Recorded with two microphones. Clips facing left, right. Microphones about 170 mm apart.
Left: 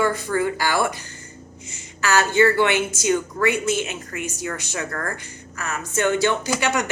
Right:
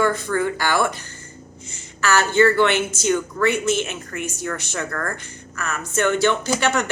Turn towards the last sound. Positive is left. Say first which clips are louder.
# right 2 dB
turn(degrees=15)  # may be behind; listen again after turning